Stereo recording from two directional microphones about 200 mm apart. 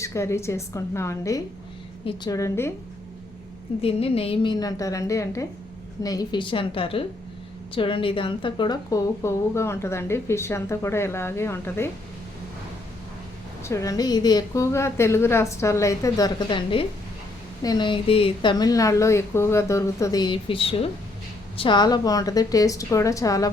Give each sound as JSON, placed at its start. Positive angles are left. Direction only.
{"t": 0.0, "sound": "speech", "side_deg": 15}
{"t": 3.8, "sound": "speech", "side_deg": 30}
{"t": 13.7, "sound": "speech", "side_deg": 15}